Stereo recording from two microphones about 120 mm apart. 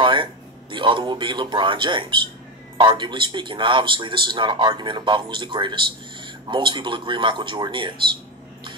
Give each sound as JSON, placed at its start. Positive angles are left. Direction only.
{"t": 0.0, "sound": "a man's voice", "side_deg": -45}